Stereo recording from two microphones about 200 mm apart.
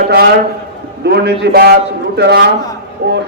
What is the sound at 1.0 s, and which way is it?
A man's voice, 55° right (ahead or behind).